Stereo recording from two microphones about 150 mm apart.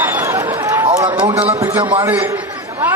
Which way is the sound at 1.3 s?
45° right (ahead or behind).